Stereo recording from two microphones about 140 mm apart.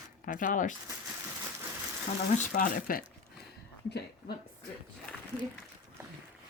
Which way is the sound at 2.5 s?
90° left.